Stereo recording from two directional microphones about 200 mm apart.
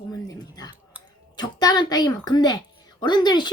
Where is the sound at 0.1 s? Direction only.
20° left (ahead or behind).